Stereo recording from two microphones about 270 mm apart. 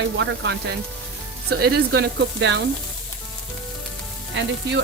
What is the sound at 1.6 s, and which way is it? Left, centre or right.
Speech, right.